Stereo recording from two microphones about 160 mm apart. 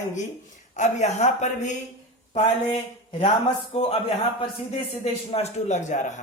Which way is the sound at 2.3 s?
35° left (ahead or behind).